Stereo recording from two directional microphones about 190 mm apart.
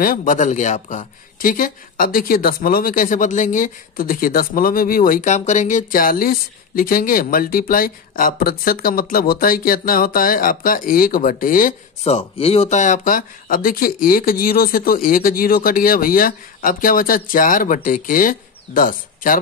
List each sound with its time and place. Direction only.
0.0 s speech: 45° left (ahead or behind)
12.0 s speech: 30° left (ahead or behind)